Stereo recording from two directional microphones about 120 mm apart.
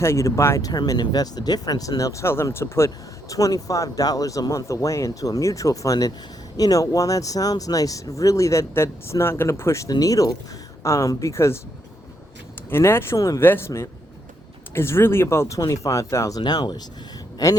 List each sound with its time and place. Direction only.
0.0 s speech: 25° left (ahead or behind)
12.7 s speech: 20° left (ahead or behind)
16.4 s speech: 35° left (ahead or behind)
17.3 s a sound: 30° left (ahead or behind)